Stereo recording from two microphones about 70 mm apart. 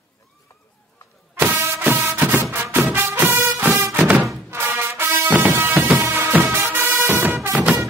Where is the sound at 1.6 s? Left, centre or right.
Right.